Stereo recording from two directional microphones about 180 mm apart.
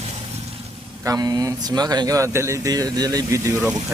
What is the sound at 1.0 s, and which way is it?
Speech, 20° right (ahead or behind).